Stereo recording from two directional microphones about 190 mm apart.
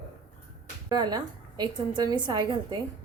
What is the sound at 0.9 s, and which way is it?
A woman's voice, 20° right (ahead or behind).